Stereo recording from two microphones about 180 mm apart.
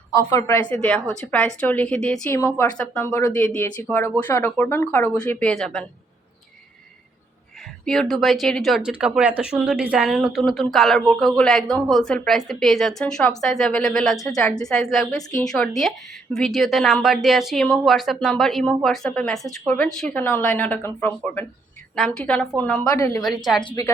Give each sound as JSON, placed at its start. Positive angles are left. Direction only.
{"t": 0.2, "sound": "a woman's voice", "side_deg": 15}
{"t": 3.1, "sound": "a woman's voice", "side_deg": 15}
{"t": 7.9, "sound": "speech", "side_deg": 0}
{"t": 23.0, "sound": "a woman's voice", "side_deg": 15}
{"t": 23.4, "sound": "speech", "side_deg": 0}